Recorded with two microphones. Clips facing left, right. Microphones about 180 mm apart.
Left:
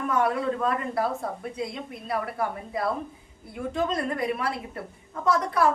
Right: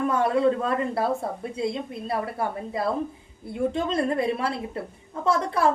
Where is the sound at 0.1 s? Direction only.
25° right (ahead or behind).